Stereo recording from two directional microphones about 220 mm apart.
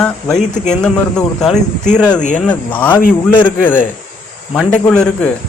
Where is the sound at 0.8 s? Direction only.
5° left (ahead or behind).